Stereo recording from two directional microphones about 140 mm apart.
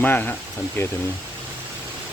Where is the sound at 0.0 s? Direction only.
15° left (ahead or behind).